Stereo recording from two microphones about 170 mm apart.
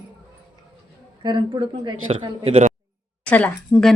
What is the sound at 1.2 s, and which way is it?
Speech, 25° right (ahead or behind).